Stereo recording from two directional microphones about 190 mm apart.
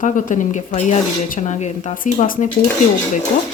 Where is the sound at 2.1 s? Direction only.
45° left (ahead or behind).